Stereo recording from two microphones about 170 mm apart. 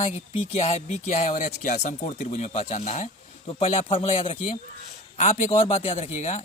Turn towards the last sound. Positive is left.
turn(degrees=40)  # may be behind; listen again after turning